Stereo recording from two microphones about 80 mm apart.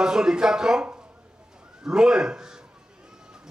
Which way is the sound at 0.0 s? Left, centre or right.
Centre.